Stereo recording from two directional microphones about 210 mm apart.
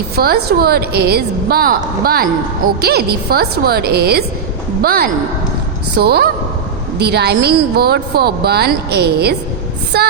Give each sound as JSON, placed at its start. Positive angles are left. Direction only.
{"t": 0.2, "sound": "a woman's voice", "side_deg": -45}